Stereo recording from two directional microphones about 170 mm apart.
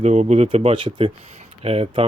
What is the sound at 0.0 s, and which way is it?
Speech, 40° right (ahead or behind).